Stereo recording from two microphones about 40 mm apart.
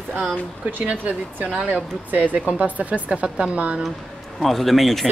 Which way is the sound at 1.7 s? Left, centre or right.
Right.